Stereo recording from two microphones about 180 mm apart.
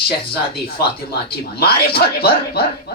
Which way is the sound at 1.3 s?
60° left (ahead or behind).